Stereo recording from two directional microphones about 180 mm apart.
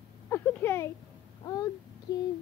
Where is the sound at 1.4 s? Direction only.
20° left (ahead or behind).